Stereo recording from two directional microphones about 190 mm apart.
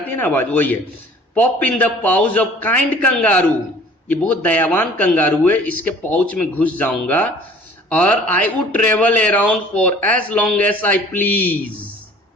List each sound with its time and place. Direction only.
0.2 s a man's voice: 10° left (ahead or behind)